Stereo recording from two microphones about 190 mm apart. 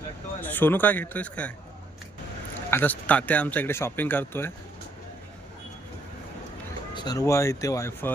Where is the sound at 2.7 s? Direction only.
10° left (ahead or behind).